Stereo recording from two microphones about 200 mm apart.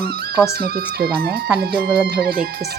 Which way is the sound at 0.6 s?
50° right (ahead or behind).